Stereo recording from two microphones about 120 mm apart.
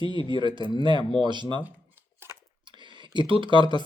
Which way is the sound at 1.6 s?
15° right (ahead or behind).